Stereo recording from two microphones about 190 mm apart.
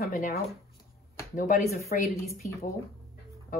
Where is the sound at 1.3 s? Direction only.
40° left (ahead or behind).